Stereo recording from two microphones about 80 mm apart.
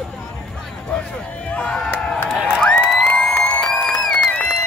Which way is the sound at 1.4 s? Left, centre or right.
Centre.